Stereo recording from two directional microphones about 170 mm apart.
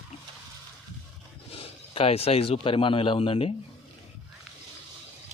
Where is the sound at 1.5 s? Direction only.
35° left (ahead or behind).